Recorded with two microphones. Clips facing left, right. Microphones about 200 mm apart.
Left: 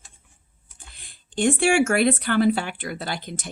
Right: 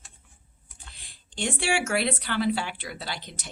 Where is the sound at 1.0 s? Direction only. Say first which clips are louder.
Left 9 dB; 50° left (ahead or behind).